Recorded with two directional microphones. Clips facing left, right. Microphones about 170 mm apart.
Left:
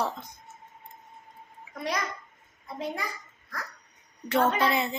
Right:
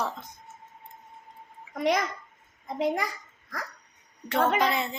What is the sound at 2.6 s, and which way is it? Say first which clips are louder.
Speech: right 6 dB; 90° right.